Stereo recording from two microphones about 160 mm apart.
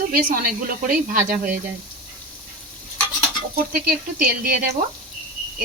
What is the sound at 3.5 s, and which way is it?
Speech, 65° right (ahead or behind).